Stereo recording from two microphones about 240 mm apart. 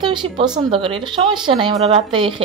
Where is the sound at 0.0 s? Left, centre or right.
Centre.